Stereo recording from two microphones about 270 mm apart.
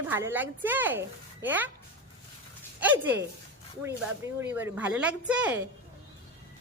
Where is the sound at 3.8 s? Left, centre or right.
Centre.